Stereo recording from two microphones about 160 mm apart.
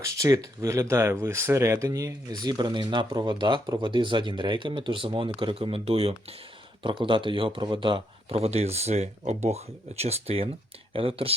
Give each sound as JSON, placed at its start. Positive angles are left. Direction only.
{"t": 0.0, "sound": "speech", "side_deg": -20}